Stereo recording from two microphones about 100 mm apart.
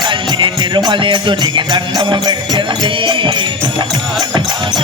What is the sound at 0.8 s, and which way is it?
Music, 55° right (ahead or behind).